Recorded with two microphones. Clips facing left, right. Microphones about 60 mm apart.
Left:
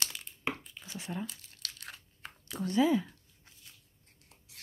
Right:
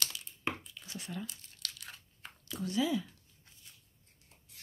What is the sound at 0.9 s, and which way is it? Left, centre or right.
Speech, left.